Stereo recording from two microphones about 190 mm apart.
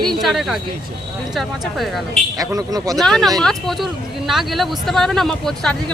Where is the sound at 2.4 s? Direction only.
20° right (ahead or behind).